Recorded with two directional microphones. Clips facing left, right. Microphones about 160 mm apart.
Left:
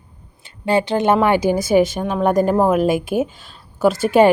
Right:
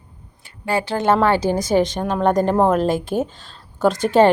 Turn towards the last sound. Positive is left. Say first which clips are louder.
# left 1 dB
turn(degrees=10)  # may be behind; listen again after turning